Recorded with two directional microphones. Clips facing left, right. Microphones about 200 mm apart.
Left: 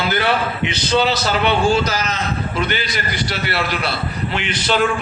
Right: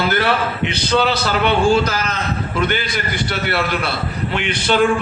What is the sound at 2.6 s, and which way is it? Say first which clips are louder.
Speech: right 3 dB; 50° right (ahead or behind).